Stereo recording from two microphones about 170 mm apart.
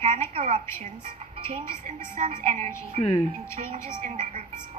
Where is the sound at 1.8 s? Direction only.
45° right (ahead or behind).